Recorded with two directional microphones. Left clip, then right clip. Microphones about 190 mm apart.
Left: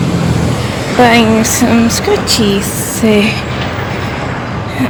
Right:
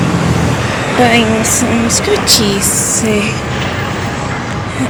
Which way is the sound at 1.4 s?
20° left (ahead or behind).